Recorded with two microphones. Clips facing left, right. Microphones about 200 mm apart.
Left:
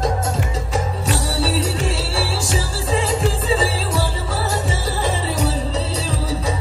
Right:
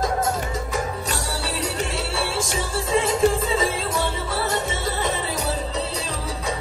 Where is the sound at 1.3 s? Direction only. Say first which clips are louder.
Left 7 dB; 30° left (ahead or behind).